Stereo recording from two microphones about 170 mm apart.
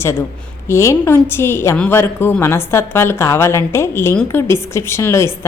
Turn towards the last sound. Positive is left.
turn(degrees=15)  # may be behind; listen again after turning